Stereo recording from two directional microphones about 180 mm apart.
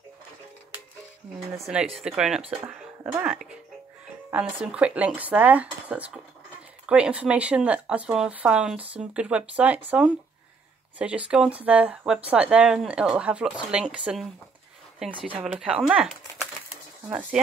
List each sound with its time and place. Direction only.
1.5 s speech: 5° right (ahead or behind)
15.1 s speech: 30° right (ahead or behind)
15.4 s speech: 5° right (ahead or behind)